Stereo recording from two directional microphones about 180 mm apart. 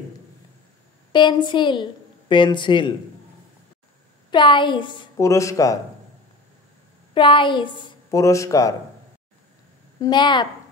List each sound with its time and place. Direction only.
1.1 s a woman's voice: 25° left (ahead or behind)
4.3 s a woman's voice: 25° left (ahead or behind)
7.2 s a woman's voice: 25° left (ahead or behind)
9.9 s a woman's voice: 25° left (ahead or behind)